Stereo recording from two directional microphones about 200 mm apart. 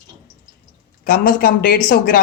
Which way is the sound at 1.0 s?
45° left (ahead or behind).